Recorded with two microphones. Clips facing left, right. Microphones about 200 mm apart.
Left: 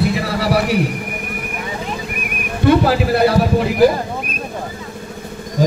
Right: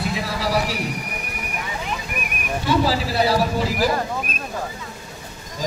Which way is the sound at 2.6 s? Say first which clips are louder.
Left 8 dB; 60° left (ahead or behind).